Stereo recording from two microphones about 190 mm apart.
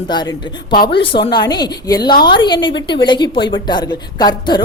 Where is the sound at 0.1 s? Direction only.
20° left (ahead or behind).